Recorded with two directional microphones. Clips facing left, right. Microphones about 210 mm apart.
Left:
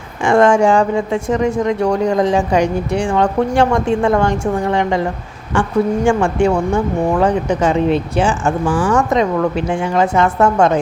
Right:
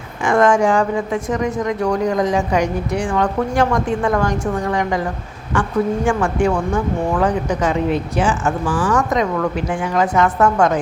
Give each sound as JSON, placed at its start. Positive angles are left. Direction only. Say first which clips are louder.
{"t": 0.3, "sound": "speech", "louder": "left 3 dB", "side_deg": 30}